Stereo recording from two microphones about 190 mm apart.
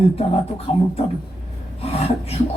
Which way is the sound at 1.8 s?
30° left (ahead or behind).